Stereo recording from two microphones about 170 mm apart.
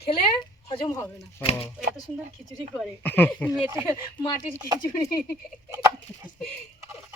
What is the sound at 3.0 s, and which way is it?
Speech, 10° left (ahead or behind).